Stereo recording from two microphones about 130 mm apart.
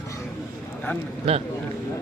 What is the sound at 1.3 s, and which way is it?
Speech, 50° right (ahead or behind).